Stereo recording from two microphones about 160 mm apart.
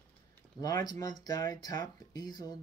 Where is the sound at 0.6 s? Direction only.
20° left (ahead or behind).